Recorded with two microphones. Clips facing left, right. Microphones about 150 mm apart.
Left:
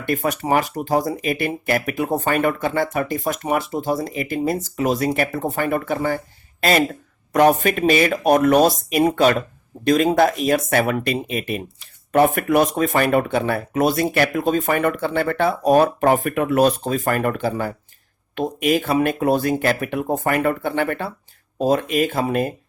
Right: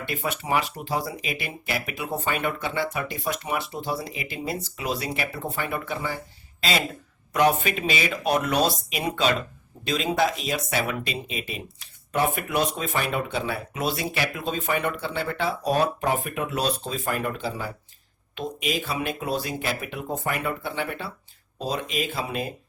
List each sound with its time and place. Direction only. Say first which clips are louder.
0.0 s speech: left 8 dB; 45° left (ahead or behind)